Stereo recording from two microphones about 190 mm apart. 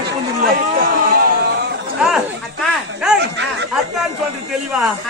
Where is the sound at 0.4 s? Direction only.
45° right (ahead or behind); by 1.8 s 60° right (ahead or behind).